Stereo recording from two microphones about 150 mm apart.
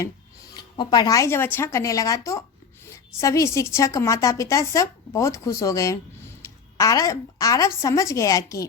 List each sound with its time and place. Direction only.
0.5 s a woman's voice: 25° left (ahead or behind)
6.4 s a sound: 20° left (ahead or behind)
7.8 s a woman's voice: 20° left (ahead or behind)